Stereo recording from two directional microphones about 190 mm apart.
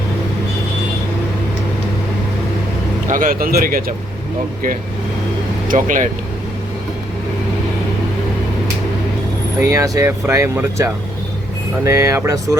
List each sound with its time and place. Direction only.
3.1 s speech: 45° right (ahead or behind)
5.6 s speech: 40° right (ahead or behind)
9.6 s speech: 15° right (ahead or behind)